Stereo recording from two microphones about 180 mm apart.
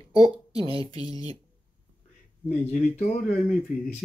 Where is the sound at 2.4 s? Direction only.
45° left (ahead or behind).